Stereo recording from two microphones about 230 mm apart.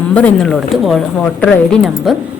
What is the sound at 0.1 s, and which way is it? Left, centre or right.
A woman's voice, centre.